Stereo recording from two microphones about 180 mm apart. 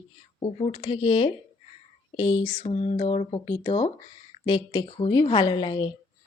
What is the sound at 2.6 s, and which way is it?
Speech, 35° left (ahead or behind).